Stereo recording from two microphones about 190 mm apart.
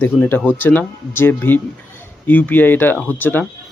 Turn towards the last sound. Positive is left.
turn(degrees=10)  # may be behind; listen again after turning